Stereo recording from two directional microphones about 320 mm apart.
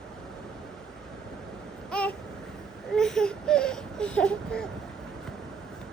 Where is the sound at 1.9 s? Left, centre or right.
Centre.